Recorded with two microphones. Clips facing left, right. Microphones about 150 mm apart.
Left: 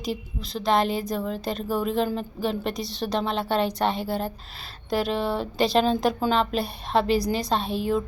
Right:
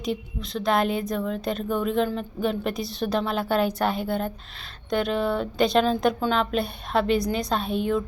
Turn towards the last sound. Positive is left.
turn(degrees=0)  # may be behind; listen again after turning